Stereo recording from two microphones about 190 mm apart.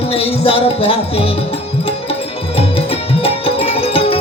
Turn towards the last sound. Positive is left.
turn(degrees=30)  # may be behind; listen again after turning